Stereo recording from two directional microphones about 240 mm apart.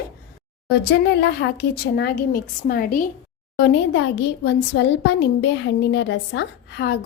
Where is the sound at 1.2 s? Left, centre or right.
Left.